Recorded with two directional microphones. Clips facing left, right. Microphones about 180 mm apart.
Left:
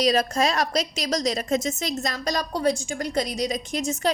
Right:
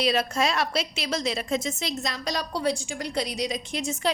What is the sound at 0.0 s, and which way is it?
A woman's voice, 40° left (ahead or behind).